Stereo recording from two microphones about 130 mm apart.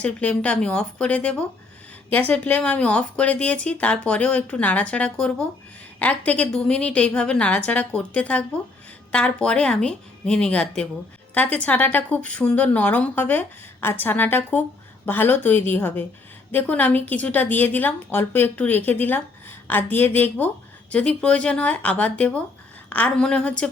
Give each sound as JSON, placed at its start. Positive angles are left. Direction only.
{"t": 0.0, "sound": "a woman's voice", "side_deg": 10}